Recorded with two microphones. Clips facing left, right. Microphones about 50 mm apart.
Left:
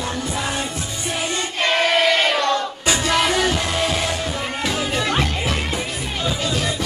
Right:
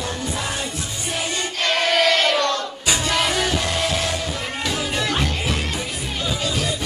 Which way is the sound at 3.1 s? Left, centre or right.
Centre.